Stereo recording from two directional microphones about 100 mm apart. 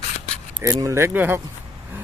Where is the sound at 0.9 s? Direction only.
20° right (ahead or behind).